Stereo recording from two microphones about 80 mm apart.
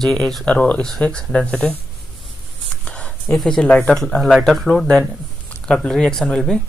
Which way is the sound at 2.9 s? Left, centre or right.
Centre.